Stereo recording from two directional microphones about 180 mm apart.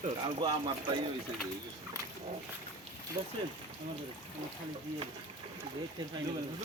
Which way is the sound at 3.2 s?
35° right (ahead or behind).